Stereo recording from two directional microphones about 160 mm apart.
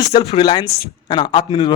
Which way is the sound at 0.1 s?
35° left (ahead or behind).